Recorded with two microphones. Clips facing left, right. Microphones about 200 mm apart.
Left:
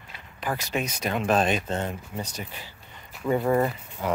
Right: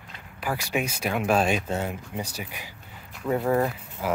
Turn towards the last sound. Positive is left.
turn(degrees=0)  # may be behind; listen again after turning